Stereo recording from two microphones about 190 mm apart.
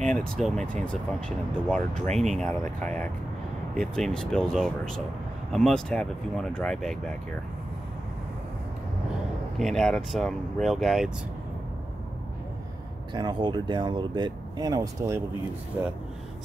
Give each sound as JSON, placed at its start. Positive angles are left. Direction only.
{"t": 0.4, "sound": "speech", "side_deg": 0}
{"t": 2.1, "sound": "speech", "side_deg": 0}
{"t": 9.6, "sound": "speech", "side_deg": 0}
{"t": 13.1, "sound": "speech", "side_deg": -25}